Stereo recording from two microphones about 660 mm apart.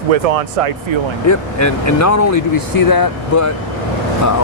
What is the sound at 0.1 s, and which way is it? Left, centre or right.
Speech, right.